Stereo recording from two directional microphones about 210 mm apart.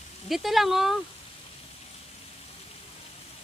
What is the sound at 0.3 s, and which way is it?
Speech, centre (ahead or behind).